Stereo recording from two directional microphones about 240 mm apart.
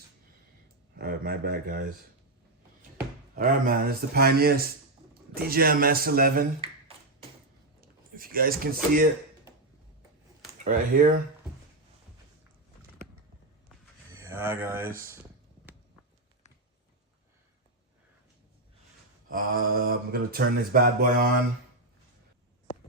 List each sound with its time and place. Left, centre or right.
0.9 s speech: right
3.0 s speech: right
6.6 s a sound: right
7.8 s speech: right
10.6 s speech: right
14.1 s a sound: centre
19.3 s speech: right